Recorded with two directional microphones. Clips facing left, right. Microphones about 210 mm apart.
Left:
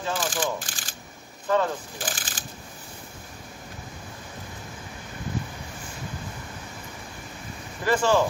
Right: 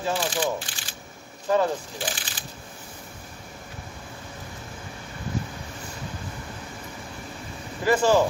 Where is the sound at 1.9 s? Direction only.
45° left (ahead or behind).